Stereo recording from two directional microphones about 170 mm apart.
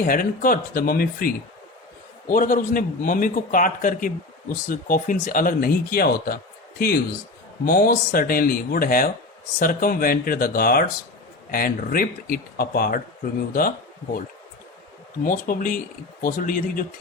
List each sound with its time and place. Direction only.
0.0 s a man's voice: 55° left (ahead or behind)
7.6 s a man's voice: 60° left (ahead or behind)
15.2 s a man's voice: 55° left (ahead or behind)